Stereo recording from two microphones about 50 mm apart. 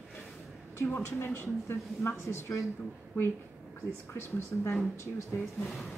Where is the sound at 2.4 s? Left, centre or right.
Left.